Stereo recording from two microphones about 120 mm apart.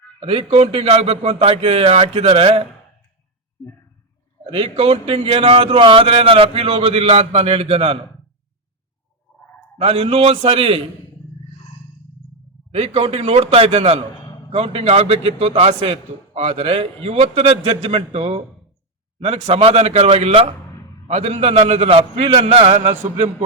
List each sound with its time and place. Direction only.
0.2 s speech: 55° right (ahead or behind)
4.5 s speech: 55° right (ahead or behind)
9.7 s a man's voice: 55° right (ahead or behind)
12.7 s a man's voice: 60° right (ahead or behind)
21.1 s a man's voice: 70° right (ahead or behind); by 22.8 s 55° right (ahead or behind)